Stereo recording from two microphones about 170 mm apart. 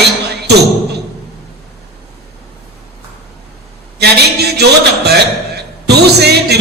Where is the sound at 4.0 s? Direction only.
75° right (ahead or behind).